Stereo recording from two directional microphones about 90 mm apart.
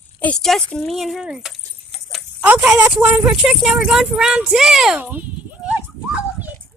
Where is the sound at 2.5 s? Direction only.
10° right (ahead or behind).